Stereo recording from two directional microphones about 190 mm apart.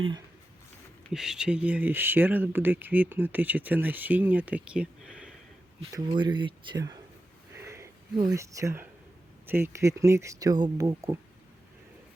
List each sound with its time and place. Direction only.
1.1 s speech: 5° right (ahead or behind)
5.9 s speech: 25° right (ahead or behind)
7.5 s a sound: 15° right (ahead or behind)
9.5 s speech: 10° right (ahead or behind)